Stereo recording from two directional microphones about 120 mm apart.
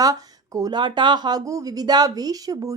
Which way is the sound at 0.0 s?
30° right (ahead or behind).